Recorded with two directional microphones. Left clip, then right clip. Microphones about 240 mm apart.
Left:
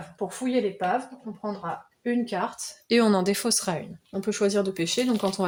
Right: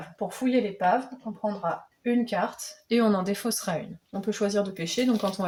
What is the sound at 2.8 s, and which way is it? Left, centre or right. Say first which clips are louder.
Speech: left 3 dB; left.